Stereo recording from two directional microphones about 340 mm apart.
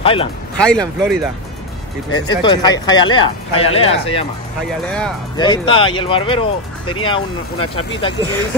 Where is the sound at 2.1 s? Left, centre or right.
Centre.